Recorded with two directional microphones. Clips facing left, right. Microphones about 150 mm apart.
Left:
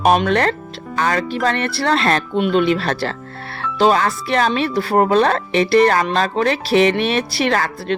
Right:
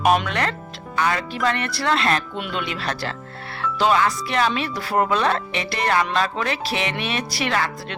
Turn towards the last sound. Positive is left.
turn(degrees=35)  # may be behind; listen again after turning